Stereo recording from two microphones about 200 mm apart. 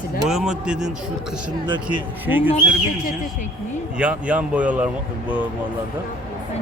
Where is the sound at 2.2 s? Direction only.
10° right (ahead or behind).